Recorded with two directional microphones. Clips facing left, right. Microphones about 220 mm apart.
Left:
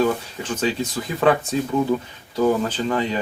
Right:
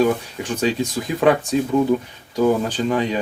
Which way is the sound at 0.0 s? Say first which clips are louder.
Right 2 dB; 15° right (ahead or behind).